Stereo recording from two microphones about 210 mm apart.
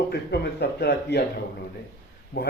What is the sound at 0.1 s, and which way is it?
Speech, 50° left (ahead or behind).